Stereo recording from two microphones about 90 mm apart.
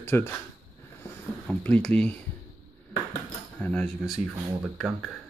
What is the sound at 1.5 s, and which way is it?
Speech, 15° left (ahead or behind).